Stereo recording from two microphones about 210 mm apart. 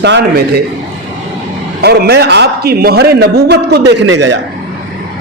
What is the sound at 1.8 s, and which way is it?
A man's voice, 50° right (ahead or behind).